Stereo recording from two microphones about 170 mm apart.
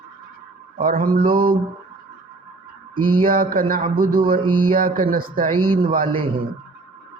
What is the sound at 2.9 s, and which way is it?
Speech, 55° right (ahead or behind).